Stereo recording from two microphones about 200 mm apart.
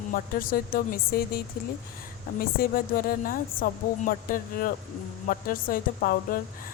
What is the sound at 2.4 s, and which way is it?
Speech, 45° left (ahead or behind).